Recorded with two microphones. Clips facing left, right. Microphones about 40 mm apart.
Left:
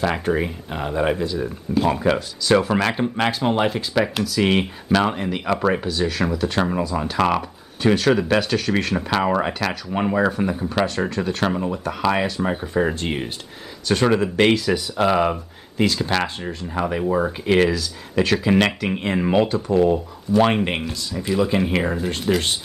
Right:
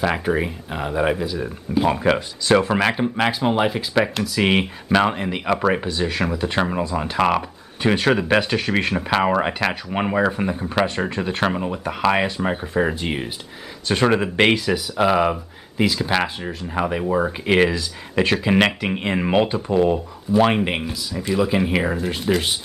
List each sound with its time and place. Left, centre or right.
0.0 s speech: centre
13.8 s speech: centre
14.7 s speech: centre
17.5 s speech: centre
20.3 s speech: centre